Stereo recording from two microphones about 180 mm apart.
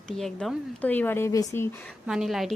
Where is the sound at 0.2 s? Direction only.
5° left (ahead or behind).